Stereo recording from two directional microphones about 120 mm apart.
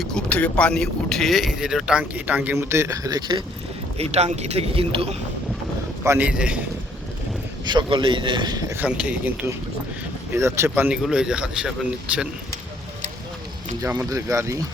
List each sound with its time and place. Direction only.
0.0 s speech: 5° left (ahead or behind); by 3.4 s 35° right (ahead or behind)
3.9 s a man's voice: 60° right (ahead or behind)
6.1 s speech: 10° right (ahead or behind)
7.6 s a man's voice: 40° right (ahead or behind)
8.7 s speech: 10° right (ahead or behind)
10.3 s speech: 25° right (ahead or behind); by 11.7 s 5° right (ahead or behind)
14.0 s speech: 25° right (ahead or behind)